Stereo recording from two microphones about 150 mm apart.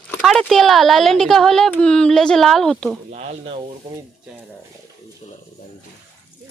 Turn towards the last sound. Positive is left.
turn(degrees=45)  # may be behind; listen again after turning